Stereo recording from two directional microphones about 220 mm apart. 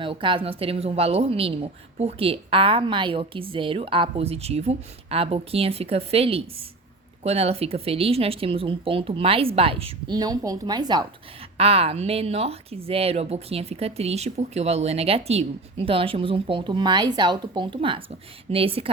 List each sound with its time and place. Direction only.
0.0 s speech: 25° right (ahead or behind)